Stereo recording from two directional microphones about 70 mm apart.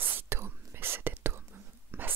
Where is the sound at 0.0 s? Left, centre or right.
Right.